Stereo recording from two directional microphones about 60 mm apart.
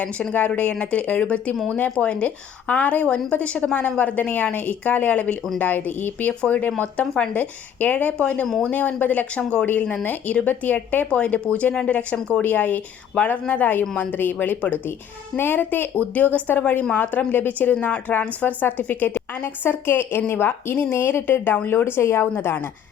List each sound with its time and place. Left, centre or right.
0.0 s a woman's voice: left